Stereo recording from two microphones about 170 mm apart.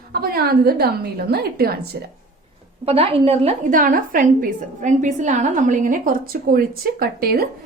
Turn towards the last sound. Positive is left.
turn(degrees=-65)  # may be behind; listen again after turning